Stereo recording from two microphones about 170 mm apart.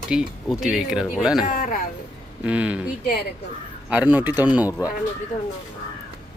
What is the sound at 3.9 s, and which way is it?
Speech, 10° right (ahead or behind).